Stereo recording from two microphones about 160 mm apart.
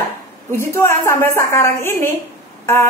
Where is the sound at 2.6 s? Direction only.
15° left (ahead or behind).